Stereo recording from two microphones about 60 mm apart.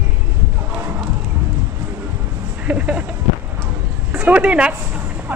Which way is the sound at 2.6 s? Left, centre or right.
Right.